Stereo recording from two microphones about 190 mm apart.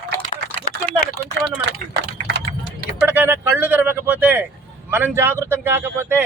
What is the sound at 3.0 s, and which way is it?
Speech, 10° right (ahead or behind).